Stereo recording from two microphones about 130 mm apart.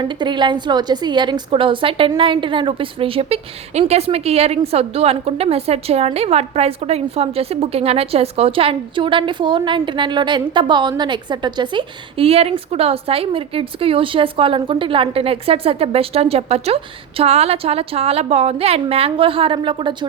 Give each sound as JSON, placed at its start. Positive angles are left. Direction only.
{"t": 0.0, "sound": "a woman's voice", "side_deg": -35}